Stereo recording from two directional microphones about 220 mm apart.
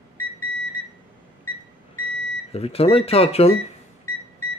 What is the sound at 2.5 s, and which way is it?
Speech, 25° left (ahead or behind).